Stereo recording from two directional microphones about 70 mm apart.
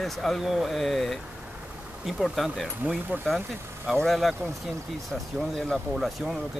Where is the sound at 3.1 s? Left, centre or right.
Right.